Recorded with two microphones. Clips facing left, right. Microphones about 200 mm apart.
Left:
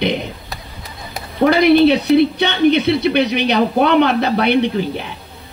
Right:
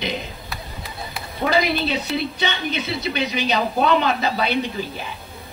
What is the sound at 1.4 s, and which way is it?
Speech, 65° left (ahead or behind).